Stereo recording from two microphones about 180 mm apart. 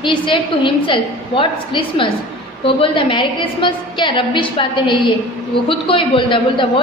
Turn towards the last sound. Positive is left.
turn(degrees=30)  # may be behind; listen again after turning